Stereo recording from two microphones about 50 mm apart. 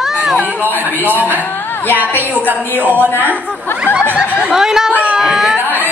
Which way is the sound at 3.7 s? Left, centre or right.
Left.